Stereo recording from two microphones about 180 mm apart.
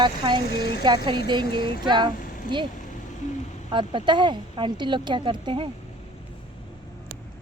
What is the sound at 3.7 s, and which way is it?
Speech, 25° right (ahead or behind).